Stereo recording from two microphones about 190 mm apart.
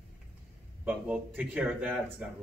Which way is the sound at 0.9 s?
10° right (ahead or behind).